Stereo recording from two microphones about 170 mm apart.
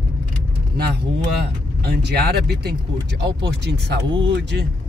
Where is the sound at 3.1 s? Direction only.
85° right.